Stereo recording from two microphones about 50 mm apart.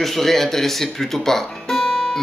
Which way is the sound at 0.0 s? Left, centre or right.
Centre.